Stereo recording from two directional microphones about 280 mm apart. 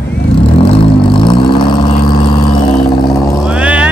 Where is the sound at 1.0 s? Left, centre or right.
Centre.